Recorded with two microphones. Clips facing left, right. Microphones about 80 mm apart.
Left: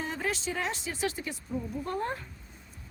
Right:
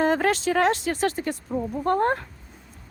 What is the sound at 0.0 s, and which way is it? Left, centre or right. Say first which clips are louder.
Speech: right 12 dB; right.